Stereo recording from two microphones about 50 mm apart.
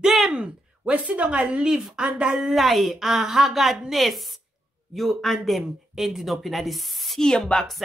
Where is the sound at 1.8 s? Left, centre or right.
Centre.